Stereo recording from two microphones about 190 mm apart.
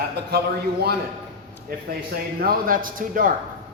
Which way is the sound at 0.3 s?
55° right (ahead or behind).